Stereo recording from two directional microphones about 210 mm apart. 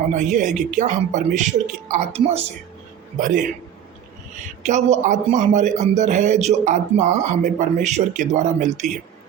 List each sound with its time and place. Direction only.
0.1 s a man's voice: 35° right (ahead or behind)
4.6 s a man's voice: 35° right (ahead or behind)